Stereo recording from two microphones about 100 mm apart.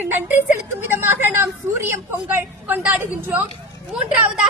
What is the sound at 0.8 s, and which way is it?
A woman's voice, 25° right (ahead or behind).